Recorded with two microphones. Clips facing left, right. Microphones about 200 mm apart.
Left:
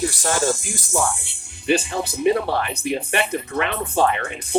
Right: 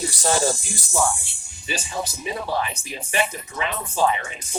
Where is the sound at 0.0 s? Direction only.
55° left (ahead or behind).